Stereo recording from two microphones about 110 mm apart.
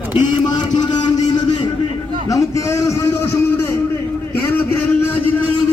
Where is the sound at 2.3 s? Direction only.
30° left (ahead or behind).